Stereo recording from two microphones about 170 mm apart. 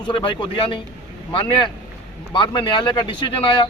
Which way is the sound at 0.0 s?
30° left (ahead or behind).